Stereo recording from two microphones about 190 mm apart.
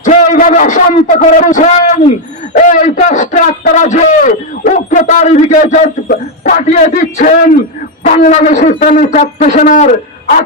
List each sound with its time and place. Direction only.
0.0 s a man's voice: 40° left (ahead or behind)